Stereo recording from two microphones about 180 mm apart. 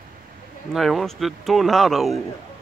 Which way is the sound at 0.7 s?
Centre (ahead or behind).